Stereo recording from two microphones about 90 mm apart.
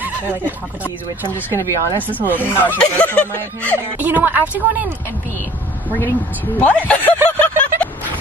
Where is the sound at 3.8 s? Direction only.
20° right (ahead or behind).